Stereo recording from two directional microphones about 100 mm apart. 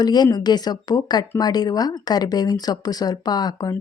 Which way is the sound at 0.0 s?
45° left (ahead or behind).